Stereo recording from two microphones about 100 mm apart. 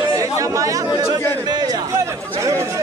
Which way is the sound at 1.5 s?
45° right (ahead or behind).